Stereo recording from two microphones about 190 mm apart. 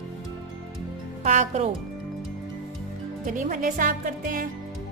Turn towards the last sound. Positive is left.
turn(degrees=-45)  # may be behind; listen again after turning